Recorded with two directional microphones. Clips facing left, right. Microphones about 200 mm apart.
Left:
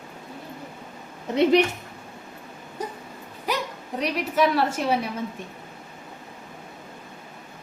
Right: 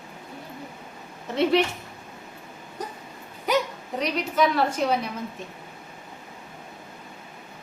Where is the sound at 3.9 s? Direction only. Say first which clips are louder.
Left 1 dB; 5° left (ahead or behind).